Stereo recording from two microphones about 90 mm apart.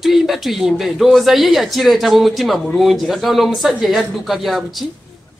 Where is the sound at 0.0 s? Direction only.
Centre (ahead or behind).